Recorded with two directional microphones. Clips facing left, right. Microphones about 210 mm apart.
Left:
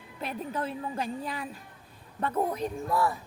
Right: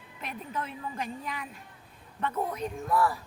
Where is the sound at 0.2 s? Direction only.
35° left (ahead or behind).